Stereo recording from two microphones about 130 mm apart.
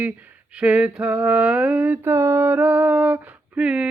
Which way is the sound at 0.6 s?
10° right (ahead or behind).